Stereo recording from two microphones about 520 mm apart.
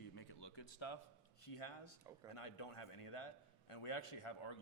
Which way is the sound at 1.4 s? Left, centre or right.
Left.